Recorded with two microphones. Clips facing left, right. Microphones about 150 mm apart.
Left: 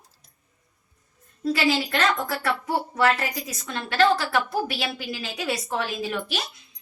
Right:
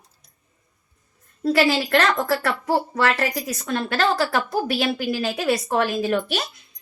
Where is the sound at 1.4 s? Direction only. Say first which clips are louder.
Right 4 dB; 65° right (ahead or behind); by 3.3 s 85° right.